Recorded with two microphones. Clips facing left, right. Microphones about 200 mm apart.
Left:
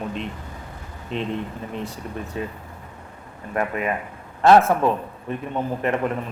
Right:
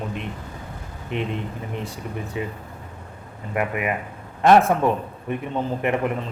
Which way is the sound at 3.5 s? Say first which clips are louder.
Even; 15° right (ahead or behind).